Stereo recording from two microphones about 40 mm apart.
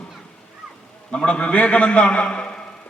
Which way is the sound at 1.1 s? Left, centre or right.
Left.